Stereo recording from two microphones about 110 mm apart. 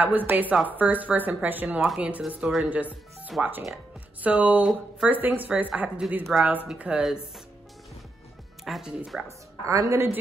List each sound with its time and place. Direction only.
0.0 s a woman's voice: 15° right (ahead or behind)
8.6 s a woman's voice: 5° right (ahead or behind)
9.7 s a woman's voice: 25° right (ahead or behind)